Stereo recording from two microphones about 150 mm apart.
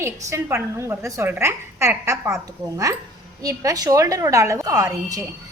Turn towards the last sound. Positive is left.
turn(degrees=-25)  # may be behind; listen again after turning